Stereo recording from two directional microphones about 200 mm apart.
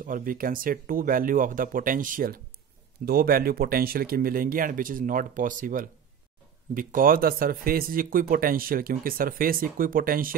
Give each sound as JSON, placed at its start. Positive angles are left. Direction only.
{"t": 0.0, "sound": "speech", "side_deg": -45}